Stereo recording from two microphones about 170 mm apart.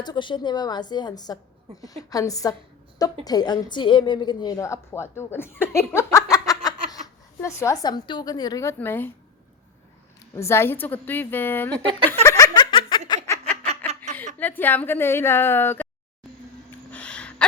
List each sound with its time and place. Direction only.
0.0 s a woman's voice: 25° left (ahead or behind)
10.3 s a woman's voice: 15° left (ahead or behind)
12.2 s laughter: 15° left (ahead or behind)
12.9 s giggle: 25° left (ahead or behind)
13.6 s a sound: 40° right (ahead or behind)
14.3 s a woman's voice: 10° left (ahead or behind)
16.9 s gasp: 5° left (ahead or behind)